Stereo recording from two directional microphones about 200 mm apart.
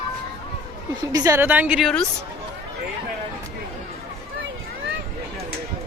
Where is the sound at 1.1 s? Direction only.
15° right (ahead or behind); by 2.0 s centre (ahead or behind).